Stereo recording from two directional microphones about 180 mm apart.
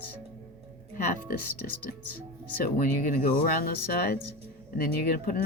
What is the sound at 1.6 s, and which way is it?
Speech, 55° left (ahead or behind).